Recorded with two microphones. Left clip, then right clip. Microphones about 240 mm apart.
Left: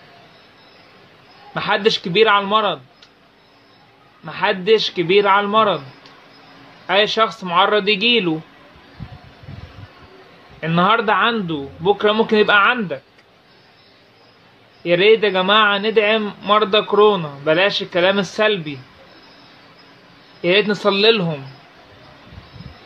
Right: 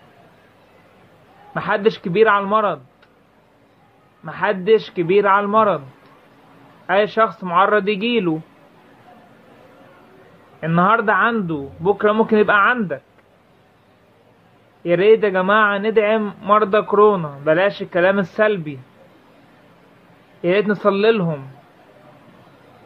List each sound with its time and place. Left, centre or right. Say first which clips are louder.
1.5 s a man's voice: left 1 dB; centre
4.2 s a man's voice: left 1 dB; centre
6.9 s a man's voice: even; centre
10.6 s a man's voice: even; centre
14.8 s a man's voice: even; centre
20.4 s a man's voice: left 1 dB; centre